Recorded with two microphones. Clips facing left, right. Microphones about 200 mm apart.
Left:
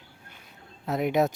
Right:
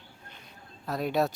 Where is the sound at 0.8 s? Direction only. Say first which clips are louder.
Left 3 dB; 20° left (ahead or behind).